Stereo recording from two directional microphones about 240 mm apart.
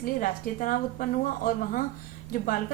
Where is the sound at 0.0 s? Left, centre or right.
Left.